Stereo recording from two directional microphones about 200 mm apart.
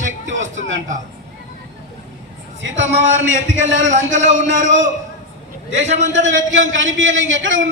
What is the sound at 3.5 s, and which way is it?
Speech, 65° right (ahead or behind).